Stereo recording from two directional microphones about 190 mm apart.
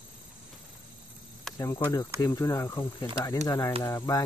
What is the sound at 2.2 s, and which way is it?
Speech, 15° left (ahead or behind).